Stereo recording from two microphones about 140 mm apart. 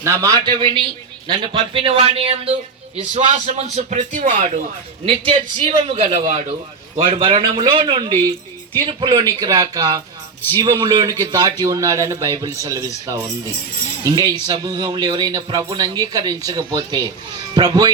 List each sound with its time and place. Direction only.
0.0 s speech: 25° right (ahead or behind)
0.4 s speech: 35° right (ahead or behind)
3.2 s speech: 60° right (ahead or behind)
5.0 s a man's voice: 40° right (ahead or behind)